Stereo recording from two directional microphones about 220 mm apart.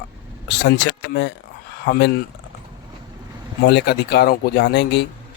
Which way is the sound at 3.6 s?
50° left (ahead or behind).